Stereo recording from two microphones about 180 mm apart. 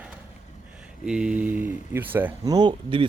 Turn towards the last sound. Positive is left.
turn(degrees=-25)  # may be behind; listen again after turning